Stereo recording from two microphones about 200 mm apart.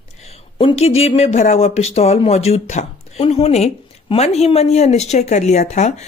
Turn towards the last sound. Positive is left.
turn(degrees=35)  # may be behind; listen again after turning